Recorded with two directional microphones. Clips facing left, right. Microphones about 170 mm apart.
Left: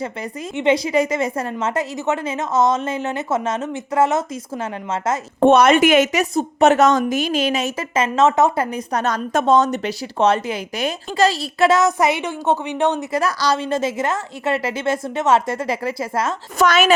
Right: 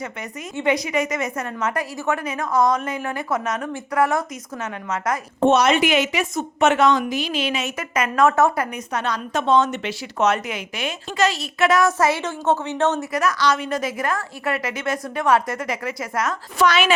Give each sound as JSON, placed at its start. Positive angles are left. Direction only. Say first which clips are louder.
{"t": 0.5, "sound": "a woman's voice", "louder": "left 4 dB", "side_deg": 25}
{"t": 5.4, "sound": "a woman's voice", "louder": "left 4 dB", "side_deg": 55}
{"t": 7.8, "sound": "a woman's voice", "louder": "left 1 dB", "side_deg": 25}
{"t": 8.7, "sound": "a woman's voice", "louder": "left 4 dB", "side_deg": 40}
{"t": 11.8, "sound": "speech", "louder": "left 1 dB", "side_deg": 15}
{"t": 13.1, "sound": "a woman's voice", "louder": "left 1 dB", "side_deg": 30}
{"t": 16.6, "sound": "a woman's voice", "louder": "left 3 dB", "side_deg": 45}